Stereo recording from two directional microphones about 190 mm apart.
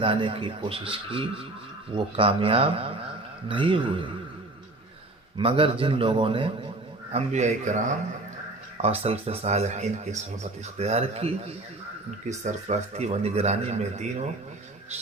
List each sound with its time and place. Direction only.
0.0 s a man's voice: 25° right (ahead or behind)
5.4 s a man's voice: 30° right (ahead or behind)
9.0 s speech: 30° right (ahead or behind)